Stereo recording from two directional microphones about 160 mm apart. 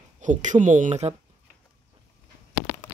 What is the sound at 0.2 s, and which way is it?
Speech, 50° right (ahead or behind).